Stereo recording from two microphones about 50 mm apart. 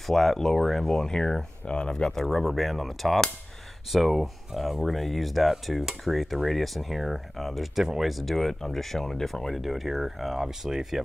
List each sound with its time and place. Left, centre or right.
0.1 s speech: centre
2.1 s speech: centre